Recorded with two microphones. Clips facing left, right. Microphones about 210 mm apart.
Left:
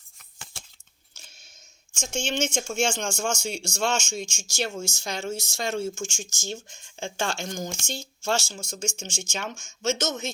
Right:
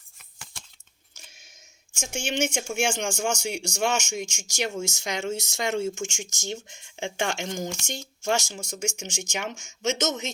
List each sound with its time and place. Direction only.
2.0 s speech: 10° right (ahead or behind)